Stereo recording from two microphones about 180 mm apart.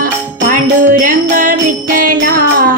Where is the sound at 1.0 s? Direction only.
45° right (ahead or behind).